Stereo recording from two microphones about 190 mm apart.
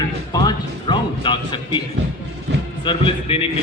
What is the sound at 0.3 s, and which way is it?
Music, 20° left (ahead or behind).